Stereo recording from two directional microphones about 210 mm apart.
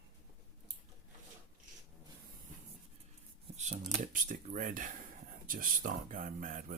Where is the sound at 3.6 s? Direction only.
35° right (ahead or behind).